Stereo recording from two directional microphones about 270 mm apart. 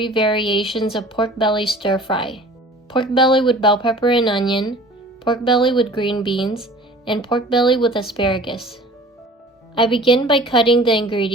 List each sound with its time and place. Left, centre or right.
0.0 s speech: centre
9.7 s a woman's voice: centre